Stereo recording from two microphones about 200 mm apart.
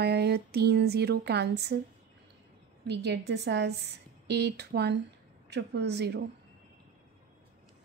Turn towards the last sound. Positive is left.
turn(degrees=-55)  # may be behind; listen again after turning